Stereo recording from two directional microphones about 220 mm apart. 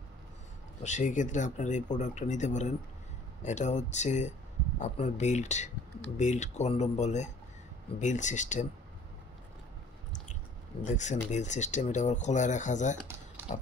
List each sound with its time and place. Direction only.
0.8 s speech: 35° left (ahead or behind)
10.8 s speech: 35° left (ahead or behind)